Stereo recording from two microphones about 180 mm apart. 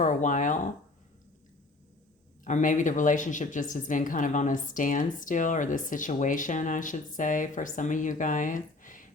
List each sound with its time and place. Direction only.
0.0 s speech: 45° left (ahead or behind)
2.4 s speech: 45° left (ahead or behind)